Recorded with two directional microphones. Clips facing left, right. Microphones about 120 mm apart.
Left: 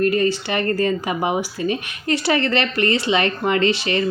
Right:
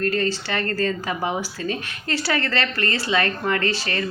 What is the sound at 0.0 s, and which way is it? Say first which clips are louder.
Speech: left 5 dB; 15° left (ahead or behind).